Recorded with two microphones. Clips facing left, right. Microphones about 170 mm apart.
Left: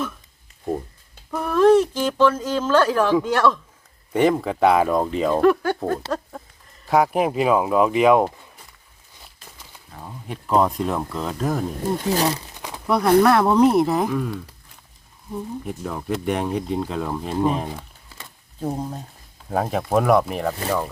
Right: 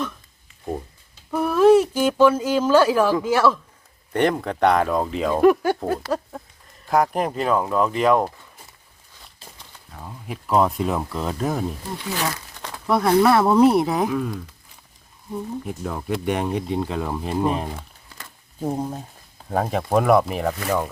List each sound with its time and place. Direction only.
1.3 s speech: 5° right (ahead or behind)
5.4 s speech: 15° right (ahead or behind); by 8.3 s 10° left (ahead or behind)
9.6 s speech: 5° left (ahead or behind)
11.9 s speech: 40° left (ahead or behind)
12.5 s crumpling: 15° left (ahead or behind)
12.9 s speech: centre (ahead or behind)